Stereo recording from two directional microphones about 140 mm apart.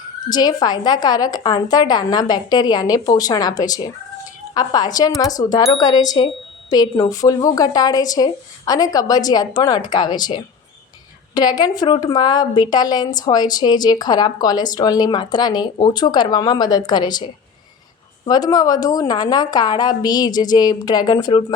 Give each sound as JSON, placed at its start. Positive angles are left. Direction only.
{"t": 0.3, "sound": "a woman's voice", "side_deg": 30}
{"t": 18.3, "sound": "a woman's voice", "side_deg": 30}